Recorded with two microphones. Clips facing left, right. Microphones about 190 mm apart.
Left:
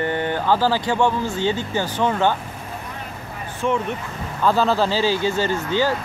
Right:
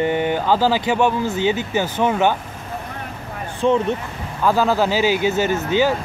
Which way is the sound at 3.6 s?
30° right (ahead or behind).